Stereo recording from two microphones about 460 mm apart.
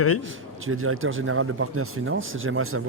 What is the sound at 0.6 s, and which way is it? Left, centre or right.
Speech, right.